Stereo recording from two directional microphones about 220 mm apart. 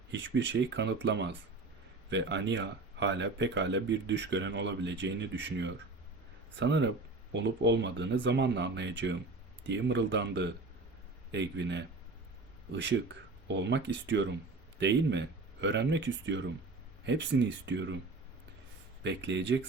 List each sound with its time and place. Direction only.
0.1 s speech: 55° right (ahead or behind)
19.0 s speech: 55° right (ahead or behind)